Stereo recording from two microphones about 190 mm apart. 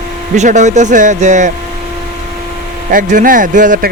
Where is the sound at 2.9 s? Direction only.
45° right (ahead or behind).